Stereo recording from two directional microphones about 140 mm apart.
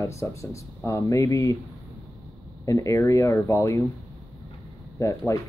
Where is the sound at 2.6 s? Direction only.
25° left (ahead or behind).